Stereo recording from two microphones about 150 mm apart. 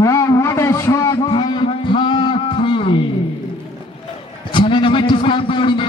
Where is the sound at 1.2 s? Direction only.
35° left (ahead or behind).